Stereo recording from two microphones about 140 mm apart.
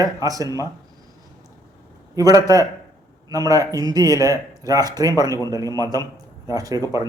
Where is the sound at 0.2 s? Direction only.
25° right (ahead or behind).